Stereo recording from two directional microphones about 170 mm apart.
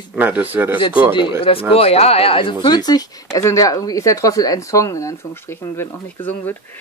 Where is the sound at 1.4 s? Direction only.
35° left (ahead or behind); by 5.9 s 15° left (ahead or behind).